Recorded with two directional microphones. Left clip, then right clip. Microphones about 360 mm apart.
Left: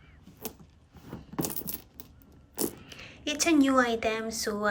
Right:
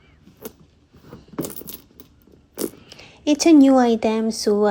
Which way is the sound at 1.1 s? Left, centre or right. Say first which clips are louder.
Right 4 dB; centre.